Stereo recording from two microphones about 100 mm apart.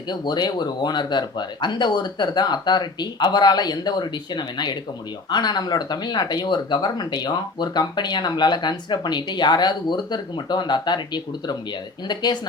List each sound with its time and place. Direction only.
0.1 s speech: 45° left (ahead or behind)